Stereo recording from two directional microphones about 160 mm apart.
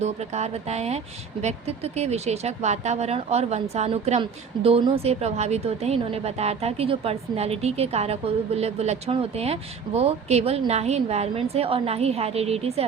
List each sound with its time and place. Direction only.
0.0 s a woman's voice: 45° right (ahead or behind)